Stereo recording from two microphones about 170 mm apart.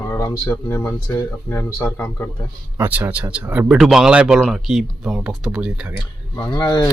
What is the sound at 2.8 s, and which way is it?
Speech, 10° right (ahead or behind).